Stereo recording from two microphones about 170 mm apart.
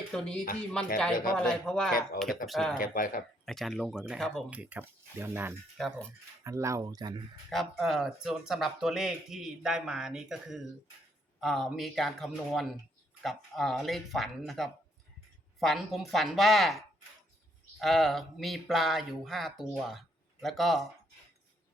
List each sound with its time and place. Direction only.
0.1 s speech: 5° left (ahead or behind)
1.1 s a man's voice: 55° left (ahead or behind)
1.4 s speech: 5° left (ahead or behind)
2.7 s speech: 50° left (ahead or behind)
3.4 s speech: centre (ahead or behind)
5.7 s speech: centre (ahead or behind)
6.4 s speech: 15° right (ahead or behind)
7.5 s speech: centre (ahead or behind)